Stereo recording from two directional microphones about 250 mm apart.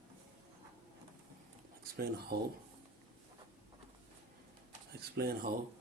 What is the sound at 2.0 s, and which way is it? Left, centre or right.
Speech, right.